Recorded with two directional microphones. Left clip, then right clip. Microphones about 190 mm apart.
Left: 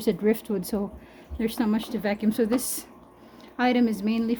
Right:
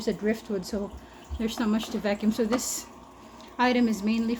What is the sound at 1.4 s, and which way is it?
Speech, 25° left (ahead or behind).